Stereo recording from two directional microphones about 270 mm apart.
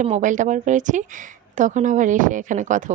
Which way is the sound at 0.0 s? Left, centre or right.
Right.